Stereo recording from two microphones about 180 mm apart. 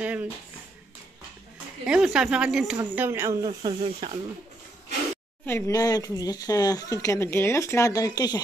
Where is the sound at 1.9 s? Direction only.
5° right (ahead or behind).